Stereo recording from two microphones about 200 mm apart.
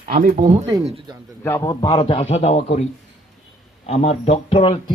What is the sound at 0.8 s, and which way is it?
Speech, 30° right (ahead or behind).